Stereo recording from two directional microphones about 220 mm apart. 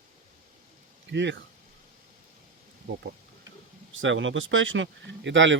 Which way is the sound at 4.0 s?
60° right (ahead or behind).